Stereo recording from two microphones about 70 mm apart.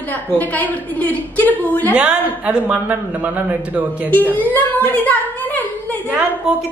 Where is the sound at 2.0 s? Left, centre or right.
Centre.